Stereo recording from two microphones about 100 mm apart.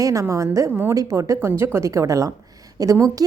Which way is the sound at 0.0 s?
30° right (ahead or behind).